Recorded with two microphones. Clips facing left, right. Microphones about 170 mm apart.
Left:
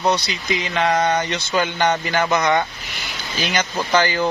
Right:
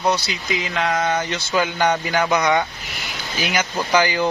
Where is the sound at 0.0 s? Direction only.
5° right (ahead or behind).